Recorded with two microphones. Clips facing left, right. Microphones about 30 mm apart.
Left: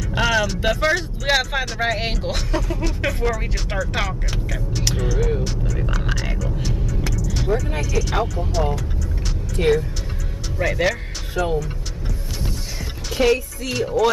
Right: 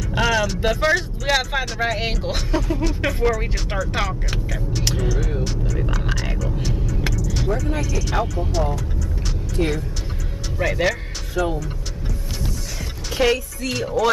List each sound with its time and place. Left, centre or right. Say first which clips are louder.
0.1 s vehicle: even; centre
1.2 s speech: left 1 dB; centre
7.2 s vehicle: left 4 dB; centre
7.8 s speech: left 1 dB; centre
9.6 s speech: left 4 dB; left
10.6 s speech: even; centre
13.2 s speech: left 1 dB; centre